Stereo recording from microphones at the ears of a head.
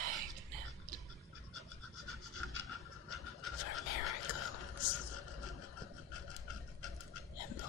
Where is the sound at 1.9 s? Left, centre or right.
Left.